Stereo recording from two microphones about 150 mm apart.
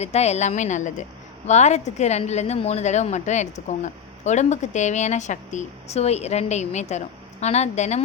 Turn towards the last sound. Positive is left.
turn(degrees=50)  # may be behind; listen again after turning